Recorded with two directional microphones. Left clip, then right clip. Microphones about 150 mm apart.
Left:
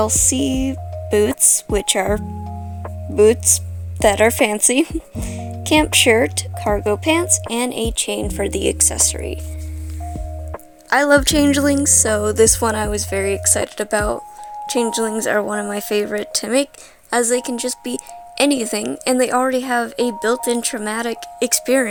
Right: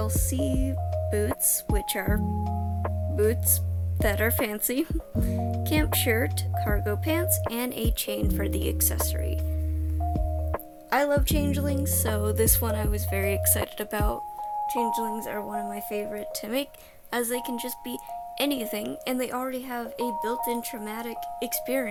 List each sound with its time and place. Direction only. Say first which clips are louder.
0.0 s a woman's voice: left 12 dB; 55° left (ahead or behind)
7.5 s speech: left 10 dB; 30° left (ahead or behind)
10.8 s a woman's voice: left 11 dB; 70° left (ahead or behind); by 14.2 s 35° left (ahead or behind)
14.7 s speech: left 9 dB; 65° left (ahead or behind)
17.1 s a woman's voice: left 11 dB; 40° left (ahead or behind); by 21.8 s 60° left (ahead or behind)